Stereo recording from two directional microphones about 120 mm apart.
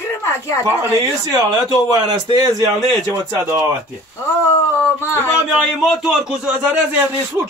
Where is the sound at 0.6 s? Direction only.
25° right (ahead or behind).